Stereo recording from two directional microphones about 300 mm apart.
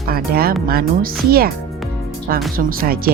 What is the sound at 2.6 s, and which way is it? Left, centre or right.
Speech, right.